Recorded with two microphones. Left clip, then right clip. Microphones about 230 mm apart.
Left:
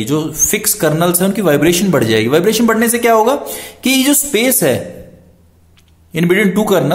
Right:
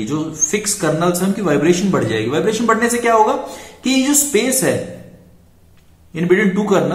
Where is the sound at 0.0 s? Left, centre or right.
Left.